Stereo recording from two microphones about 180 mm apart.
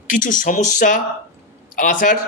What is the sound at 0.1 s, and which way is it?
Speech, 45° left (ahead or behind).